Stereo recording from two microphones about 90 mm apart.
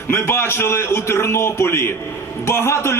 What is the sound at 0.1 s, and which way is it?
A man's voice, 25° left (ahead or behind).